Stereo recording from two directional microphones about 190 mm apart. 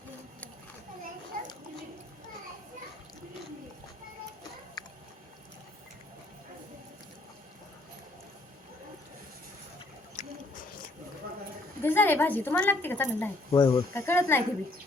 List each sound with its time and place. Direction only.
1.3 s children playing: 50° right (ahead or behind)
4.8 s biting: 20° left (ahead or behind)
10.2 s a sound: 40° left (ahead or behind)
11.8 s a woman's voice: 10° left (ahead or behind)
13.6 s a woman's voice: 20° left (ahead or behind)